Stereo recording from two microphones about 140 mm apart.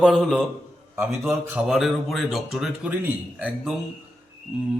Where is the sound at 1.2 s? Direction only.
15° right (ahead or behind).